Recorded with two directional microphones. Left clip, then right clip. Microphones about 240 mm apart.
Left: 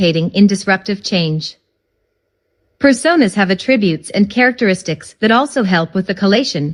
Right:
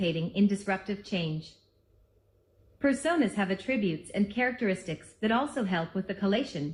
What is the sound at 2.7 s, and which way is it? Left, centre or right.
A woman's voice, left.